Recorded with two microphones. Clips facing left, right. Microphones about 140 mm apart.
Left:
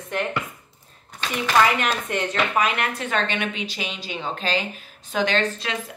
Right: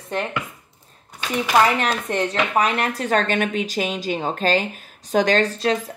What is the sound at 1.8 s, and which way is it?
Speech, 35° right (ahead or behind).